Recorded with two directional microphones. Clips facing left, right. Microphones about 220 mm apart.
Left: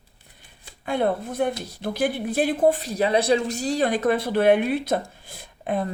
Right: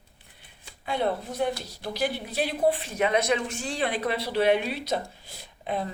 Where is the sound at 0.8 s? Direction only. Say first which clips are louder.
Left 4 dB; 50° left (ahead or behind).